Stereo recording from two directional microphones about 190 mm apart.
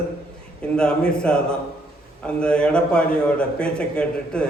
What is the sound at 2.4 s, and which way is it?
A man's voice, 5° left (ahead or behind).